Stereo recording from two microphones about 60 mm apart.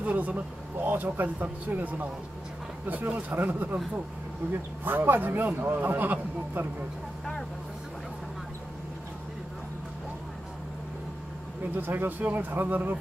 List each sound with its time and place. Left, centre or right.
0.0 s speech: right
3.2 s a man's voice: right
11.7 s a man's voice: right